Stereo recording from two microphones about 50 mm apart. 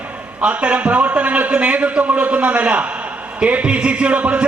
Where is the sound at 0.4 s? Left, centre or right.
Right.